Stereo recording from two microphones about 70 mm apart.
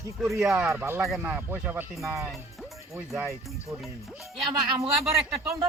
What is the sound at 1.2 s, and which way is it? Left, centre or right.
Speech, right.